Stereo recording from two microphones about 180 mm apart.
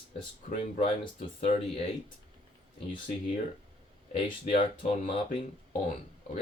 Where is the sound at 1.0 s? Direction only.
35° left (ahead or behind).